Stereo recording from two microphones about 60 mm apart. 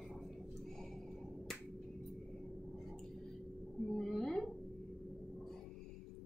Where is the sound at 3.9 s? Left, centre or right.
Centre.